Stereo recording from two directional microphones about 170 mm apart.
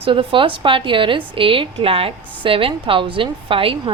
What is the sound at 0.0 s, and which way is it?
A woman's voice, 30° right (ahead or behind).